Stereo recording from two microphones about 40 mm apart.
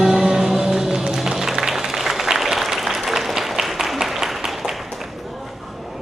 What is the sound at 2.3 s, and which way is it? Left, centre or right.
Applause, centre.